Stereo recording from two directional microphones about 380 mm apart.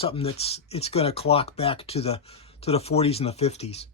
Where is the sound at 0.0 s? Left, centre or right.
Centre.